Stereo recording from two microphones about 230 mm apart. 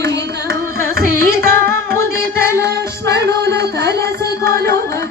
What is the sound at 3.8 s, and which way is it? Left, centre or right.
Carnatic music, centre.